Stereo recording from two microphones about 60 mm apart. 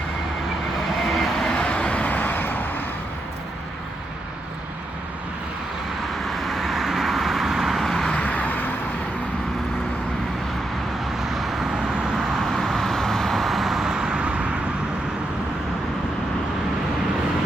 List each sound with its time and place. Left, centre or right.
1.1 s vehicle: centre; by 2.8 s left
6.2 s vehicle: centre
8.1 s vehicle: left
11.2 s vehicle: centre